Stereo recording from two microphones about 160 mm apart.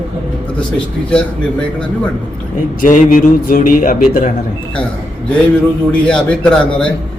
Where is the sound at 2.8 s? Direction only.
55° left (ahead or behind).